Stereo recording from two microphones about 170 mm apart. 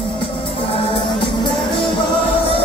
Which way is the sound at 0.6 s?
30° left (ahead or behind).